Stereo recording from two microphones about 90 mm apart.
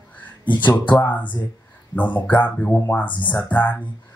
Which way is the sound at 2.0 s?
20° left (ahead or behind).